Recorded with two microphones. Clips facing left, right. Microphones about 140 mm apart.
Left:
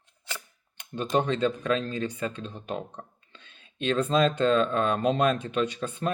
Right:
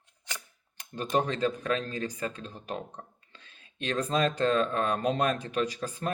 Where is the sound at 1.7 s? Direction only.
30° left (ahead or behind).